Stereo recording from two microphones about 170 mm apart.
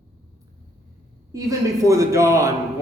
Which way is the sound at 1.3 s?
20° right (ahead or behind).